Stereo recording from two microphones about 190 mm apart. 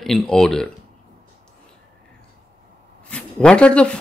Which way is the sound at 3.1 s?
5° left (ahead or behind).